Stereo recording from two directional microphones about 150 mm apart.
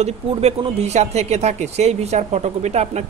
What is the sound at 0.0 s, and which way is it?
Speech, 45° right (ahead or behind).